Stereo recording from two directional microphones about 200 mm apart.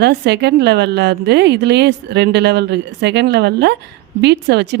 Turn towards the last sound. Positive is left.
turn(degrees=-60)  # may be behind; listen again after turning